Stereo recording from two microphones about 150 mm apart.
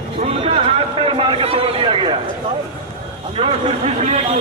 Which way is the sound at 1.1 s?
35° right (ahead or behind).